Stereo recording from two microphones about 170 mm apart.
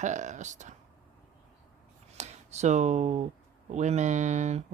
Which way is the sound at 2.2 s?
40° right (ahead or behind).